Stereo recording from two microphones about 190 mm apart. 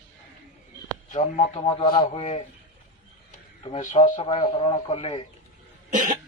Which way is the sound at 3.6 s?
35° left (ahead or behind).